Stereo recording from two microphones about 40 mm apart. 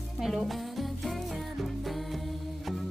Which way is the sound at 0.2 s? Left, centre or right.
Centre.